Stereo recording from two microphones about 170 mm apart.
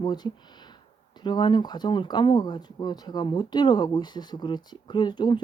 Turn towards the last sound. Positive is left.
turn(degrees=25)  # may be behind; listen again after turning